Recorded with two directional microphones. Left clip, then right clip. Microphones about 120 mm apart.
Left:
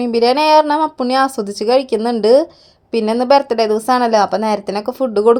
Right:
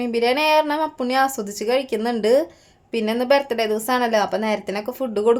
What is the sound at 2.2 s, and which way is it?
Speech, 40° left (ahead or behind).